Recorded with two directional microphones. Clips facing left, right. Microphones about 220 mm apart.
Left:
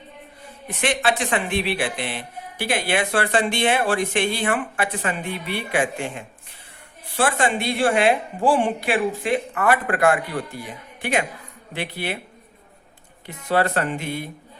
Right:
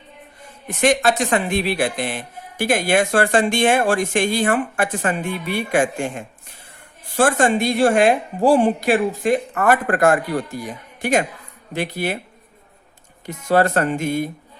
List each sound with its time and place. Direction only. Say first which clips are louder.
0.8 s speech: right 5 dB; 45° right (ahead or behind)
13.2 s speech: right 4 dB; 45° right (ahead or behind)